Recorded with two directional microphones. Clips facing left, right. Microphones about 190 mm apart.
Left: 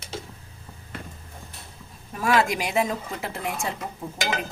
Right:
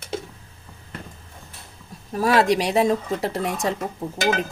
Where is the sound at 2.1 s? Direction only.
35° right (ahead or behind).